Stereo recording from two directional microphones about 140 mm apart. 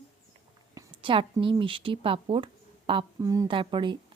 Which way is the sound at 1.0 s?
35° right (ahead or behind).